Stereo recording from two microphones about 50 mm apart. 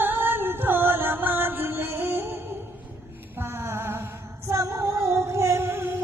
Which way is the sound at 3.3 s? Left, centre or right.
Right.